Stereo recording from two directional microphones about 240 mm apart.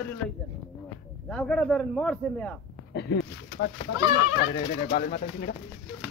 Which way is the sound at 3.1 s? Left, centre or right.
Left.